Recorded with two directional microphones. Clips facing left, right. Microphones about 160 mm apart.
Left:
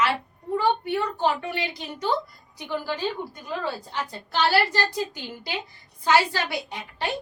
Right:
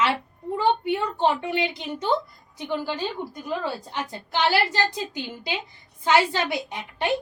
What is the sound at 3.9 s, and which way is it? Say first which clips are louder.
A woman's voice: right 1 dB; 20° right (ahead or behind).